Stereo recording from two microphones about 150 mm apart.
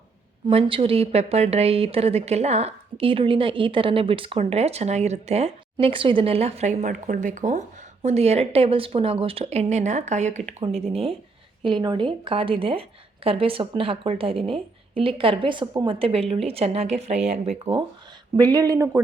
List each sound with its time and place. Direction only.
0.4 s a woman's voice: 40° right (ahead or behind); by 7.6 s 55° right (ahead or behind)
8.0 s a woman's voice: 45° right (ahead or behind)
11.6 s a woman's voice: 30° right (ahead or behind)
16.0 s a woman's voice: 40° right (ahead or behind)
18.3 s speech: 25° right (ahead or behind)